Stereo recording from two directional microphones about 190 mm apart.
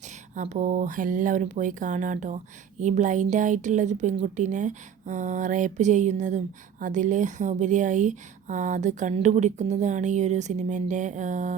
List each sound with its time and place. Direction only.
0.3 s a woman's voice: 40° right (ahead or behind)